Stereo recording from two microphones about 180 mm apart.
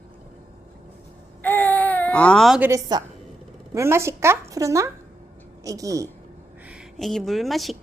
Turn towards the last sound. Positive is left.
turn(degrees=0)  # may be behind; listen again after turning